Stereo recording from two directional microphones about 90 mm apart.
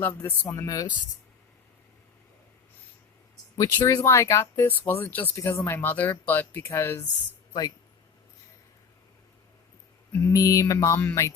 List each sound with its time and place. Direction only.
0.0 s speech: 20° left (ahead or behind)
0.5 s mantra: 35° left (ahead or behind)
3.6 s speech: 40° left (ahead or behind); by 5.3 s 20° left (ahead or behind)
5.3 s speech: 30° left (ahead or behind)
10.1 s mantra: 30° left (ahead or behind)
10.3 s mantra: 40° left (ahead or behind)